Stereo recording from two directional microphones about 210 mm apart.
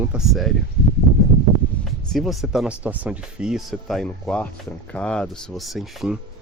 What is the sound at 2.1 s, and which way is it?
Speech, centre (ahead or behind).